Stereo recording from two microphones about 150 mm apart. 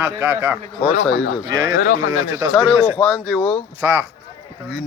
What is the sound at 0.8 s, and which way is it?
Speech, 50° left (ahead or behind).